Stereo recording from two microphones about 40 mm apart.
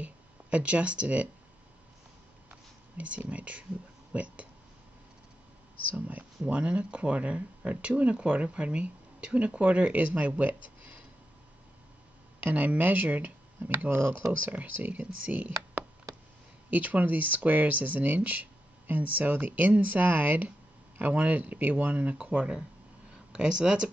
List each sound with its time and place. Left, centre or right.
0.0 s speech: right
3.0 s speech: right
5.9 s speech: right
6.4 s speech: right
12.4 s speech: right
13.8 s speech: right
14.5 s speech: right
16.7 s speech: right
23.3 s speech: right